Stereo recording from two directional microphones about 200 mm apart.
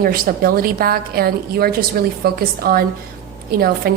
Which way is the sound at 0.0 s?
45° right (ahead or behind).